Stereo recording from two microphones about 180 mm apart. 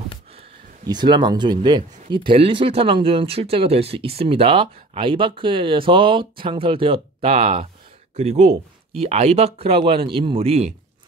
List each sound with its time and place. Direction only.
0.8 s speech: 25° right (ahead or behind)